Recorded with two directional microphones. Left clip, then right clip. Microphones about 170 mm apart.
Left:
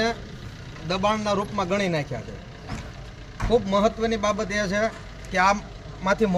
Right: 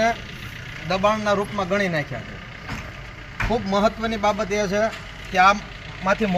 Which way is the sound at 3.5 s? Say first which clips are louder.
Even; 40° left (ahead or behind).